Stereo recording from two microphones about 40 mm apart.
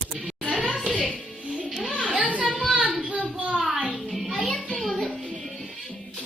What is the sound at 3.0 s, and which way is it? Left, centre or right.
Child singing, right.